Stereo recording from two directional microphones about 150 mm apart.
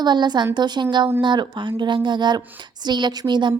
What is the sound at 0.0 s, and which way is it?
A woman's voice, 30° right (ahead or behind).